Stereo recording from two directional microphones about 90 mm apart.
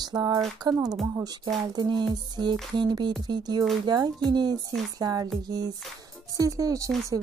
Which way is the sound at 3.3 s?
50° right (ahead or behind).